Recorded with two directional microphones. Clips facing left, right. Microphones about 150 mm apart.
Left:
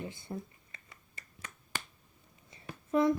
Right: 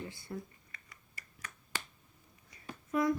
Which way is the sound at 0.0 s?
20° left (ahead or behind).